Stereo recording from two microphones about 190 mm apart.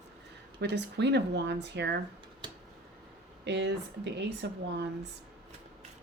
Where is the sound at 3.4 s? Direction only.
60° right (ahead or behind).